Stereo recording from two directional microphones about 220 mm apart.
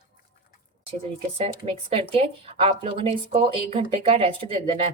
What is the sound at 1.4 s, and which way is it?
A woman's voice, 25° right (ahead or behind).